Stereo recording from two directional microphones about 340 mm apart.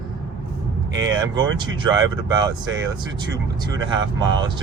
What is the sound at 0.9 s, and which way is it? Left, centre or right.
Speech, right.